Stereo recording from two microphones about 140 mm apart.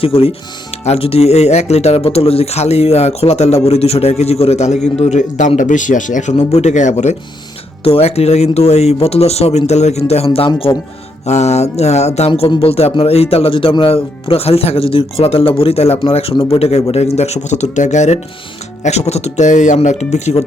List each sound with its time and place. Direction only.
0.0 s speech: 45° left (ahead or behind); by 6.3 s 65° left (ahead or behind)
6.3 s speech: 50° left (ahead or behind)
11.3 s speech: 50° left (ahead or behind)
12.3 s speech: 35° left (ahead or behind); by 20.4 s 50° left (ahead or behind)